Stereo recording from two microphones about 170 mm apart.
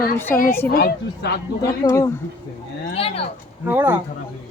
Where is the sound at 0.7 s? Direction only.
60° left (ahead or behind).